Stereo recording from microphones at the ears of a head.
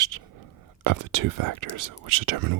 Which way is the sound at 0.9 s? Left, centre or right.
Right.